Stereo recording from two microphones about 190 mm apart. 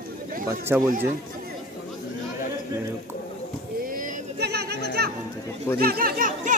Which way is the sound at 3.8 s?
45° right (ahead or behind).